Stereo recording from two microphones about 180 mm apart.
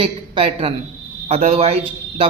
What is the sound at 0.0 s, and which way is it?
A woman's voice, 30° right (ahead or behind).